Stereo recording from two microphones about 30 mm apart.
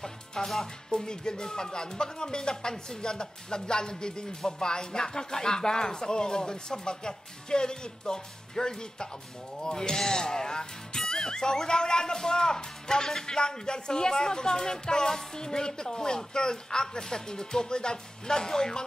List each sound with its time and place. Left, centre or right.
0.0 s speech: centre